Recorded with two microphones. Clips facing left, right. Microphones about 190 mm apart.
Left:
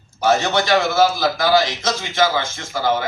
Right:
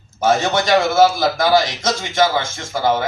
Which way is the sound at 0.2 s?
50° right (ahead or behind).